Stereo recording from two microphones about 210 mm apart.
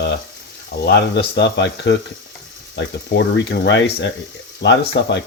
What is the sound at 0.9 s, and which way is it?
Speech, 55° left (ahead or behind).